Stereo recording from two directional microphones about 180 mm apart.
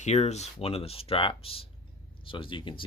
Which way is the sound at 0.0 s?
40° left (ahead or behind).